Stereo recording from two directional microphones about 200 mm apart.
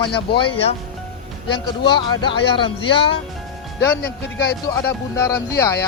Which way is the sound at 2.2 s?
25° left (ahead or behind).